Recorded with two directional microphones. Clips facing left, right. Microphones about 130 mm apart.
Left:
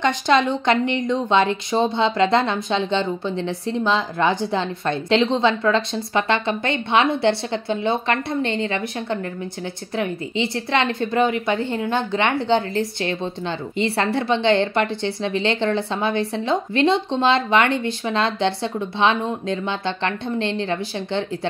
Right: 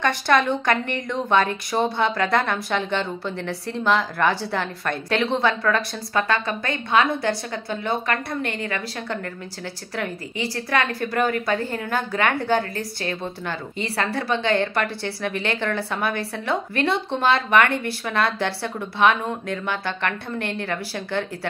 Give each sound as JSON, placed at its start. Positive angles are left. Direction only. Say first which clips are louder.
{"t": 0.0, "sound": "a woman's voice", "louder": "left 2 dB", "side_deg": 20}